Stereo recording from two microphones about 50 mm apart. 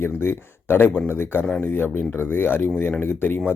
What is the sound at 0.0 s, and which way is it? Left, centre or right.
Speech, left.